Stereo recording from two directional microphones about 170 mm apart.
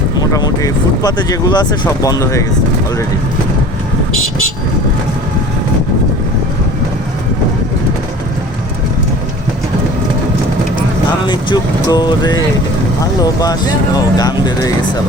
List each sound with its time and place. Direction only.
0.2 s speech: 20° left (ahead or behind)
11.3 s speech: 25° left (ahead or behind)